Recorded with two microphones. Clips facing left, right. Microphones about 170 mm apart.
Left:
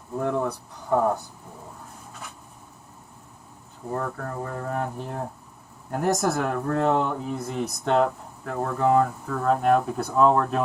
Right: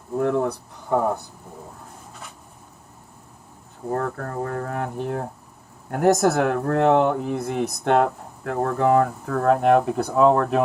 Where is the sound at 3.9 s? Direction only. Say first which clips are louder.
Right 3 dB; 65° right (ahead or behind).